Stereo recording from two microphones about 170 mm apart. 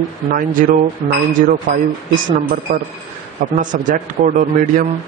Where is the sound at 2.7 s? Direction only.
40° right (ahead or behind).